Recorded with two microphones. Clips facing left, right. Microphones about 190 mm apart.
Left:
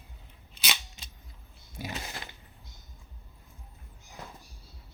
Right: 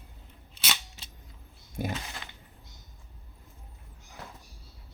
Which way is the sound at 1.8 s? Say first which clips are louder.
Right 7 dB; 50° right (ahead or behind).